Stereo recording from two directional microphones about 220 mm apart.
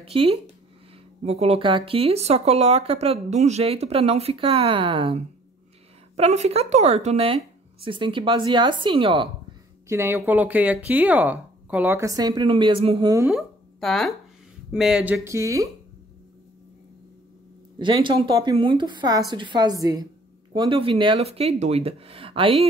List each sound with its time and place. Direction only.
0.0 s speech: 25° right (ahead or behind)
9.8 s speech: 10° right (ahead or behind)
13.3 s speech: centre (ahead or behind); by 15.7 s 15° right (ahead or behind)
17.7 s speech: 20° right (ahead or behind)